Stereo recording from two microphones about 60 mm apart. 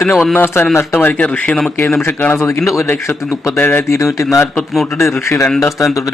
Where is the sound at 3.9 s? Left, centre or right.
Left.